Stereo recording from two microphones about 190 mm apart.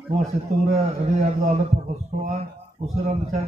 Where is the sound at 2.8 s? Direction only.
35° right (ahead or behind).